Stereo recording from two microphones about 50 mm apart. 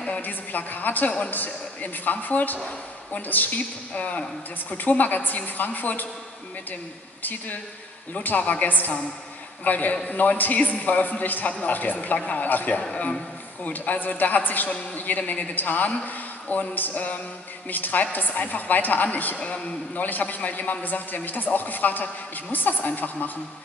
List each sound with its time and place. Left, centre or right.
0.2 s a woman's voice: left
7.2 s a woman's voice: left
19.3 s a man's voice: left
20.1 s a woman's voice: left